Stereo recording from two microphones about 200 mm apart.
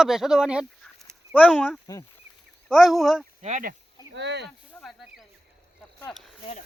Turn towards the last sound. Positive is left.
turn(degrees=5)  # may be behind; listen again after turning